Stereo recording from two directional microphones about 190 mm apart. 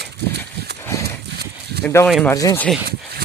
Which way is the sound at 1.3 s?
60° right (ahead or behind).